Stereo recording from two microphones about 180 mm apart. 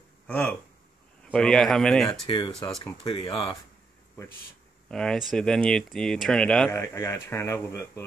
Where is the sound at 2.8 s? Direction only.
25° left (ahead or behind).